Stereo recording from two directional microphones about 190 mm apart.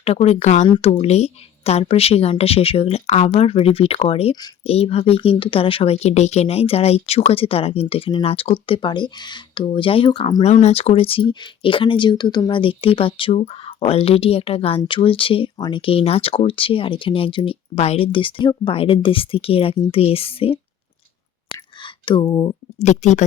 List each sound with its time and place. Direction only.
0.0 s a woman's voice: 30° left (ahead or behind)
10.5 s speech: 35° left (ahead or behind)
21.5 s whispering: 25° left (ahead or behind)
22.8 s a woman's voice: 35° left (ahead or behind)